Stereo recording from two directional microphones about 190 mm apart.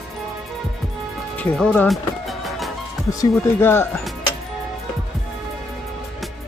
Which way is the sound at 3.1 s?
15° left (ahead or behind).